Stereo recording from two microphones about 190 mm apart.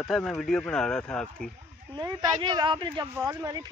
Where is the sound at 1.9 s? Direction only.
25° right (ahead or behind).